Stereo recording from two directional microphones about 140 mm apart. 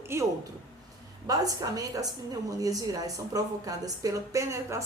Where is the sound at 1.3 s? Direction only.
25° right (ahead or behind).